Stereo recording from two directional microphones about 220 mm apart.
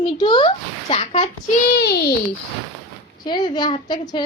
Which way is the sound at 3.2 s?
20° left (ahead or behind).